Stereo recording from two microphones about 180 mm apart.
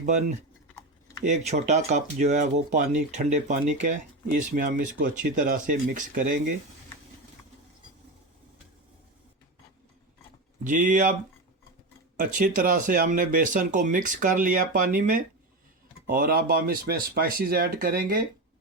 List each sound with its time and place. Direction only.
0.0 s speech: 45° right (ahead or behind)
10.6 s speech: 45° right (ahead or behind)
12.1 s speech: 45° right (ahead or behind)